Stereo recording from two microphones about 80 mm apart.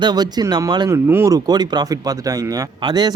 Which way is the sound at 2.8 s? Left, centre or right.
Right.